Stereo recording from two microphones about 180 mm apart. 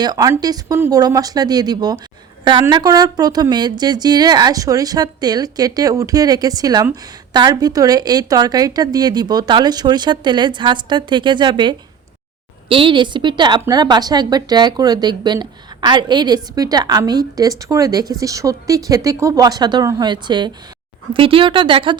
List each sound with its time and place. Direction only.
0.0 s a woman's voice: 20° right (ahead or behind)